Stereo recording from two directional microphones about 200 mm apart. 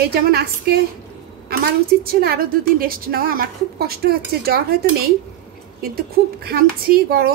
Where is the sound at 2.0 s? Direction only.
50° right (ahead or behind).